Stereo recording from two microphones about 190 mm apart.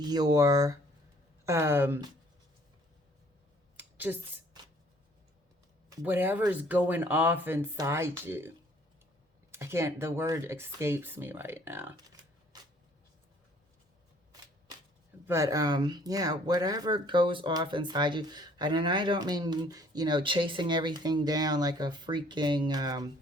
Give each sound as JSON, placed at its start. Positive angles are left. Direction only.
{"t": 0.0, "sound": "speech", "side_deg": -20}
{"t": 3.8, "sound": "a sound", "side_deg": -10}
{"t": 6.0, "sound": "speech", "side_deg": -10}
{"t": 15.3, "sound": "speech", "side_deg": -15}